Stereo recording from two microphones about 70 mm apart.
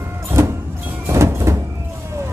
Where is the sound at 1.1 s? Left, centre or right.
Right.